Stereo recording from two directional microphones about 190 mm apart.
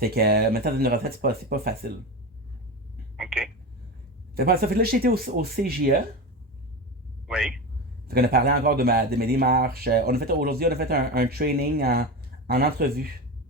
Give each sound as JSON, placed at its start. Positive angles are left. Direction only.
{"t": 0.0, "sound": "speech", "side_deg": -55}
{"t": 3.2, "sound": "a sound", "side_deg": 0}
{"t": 4.4, "sound": "speech", "side_deg": -55}
{"t": 7.3, "sound": "speech", "side_deg": -5}
{"t": 8.0, "sound": "speech", "side_deg": -55}